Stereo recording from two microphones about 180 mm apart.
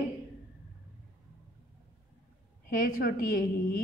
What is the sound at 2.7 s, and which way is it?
A woman's voice, 50° left (ahead or behind).